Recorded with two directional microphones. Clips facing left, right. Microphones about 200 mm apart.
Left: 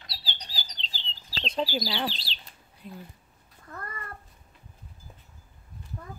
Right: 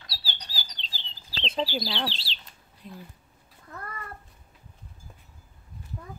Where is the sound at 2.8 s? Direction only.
5° left (ahead or behind).